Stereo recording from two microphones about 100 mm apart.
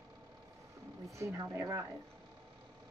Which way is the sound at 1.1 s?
30° right (ahead or behind).